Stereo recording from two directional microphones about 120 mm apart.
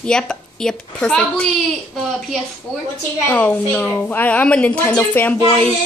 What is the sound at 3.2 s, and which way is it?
A woman's voice, 15° left (ahead or behind).